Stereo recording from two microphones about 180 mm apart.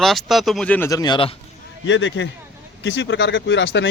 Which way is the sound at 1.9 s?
90° left.